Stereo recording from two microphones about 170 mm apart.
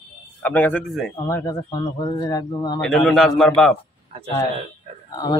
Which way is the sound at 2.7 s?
Centre (ahead or behind).